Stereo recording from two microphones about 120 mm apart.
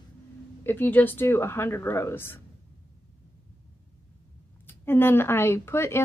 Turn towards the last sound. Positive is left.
turn(degrees=20)  # may be behind; listen again after turning